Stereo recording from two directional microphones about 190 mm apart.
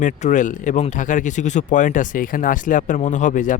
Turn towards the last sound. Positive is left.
turn(degrees=40)  # may be behind; listen again after turning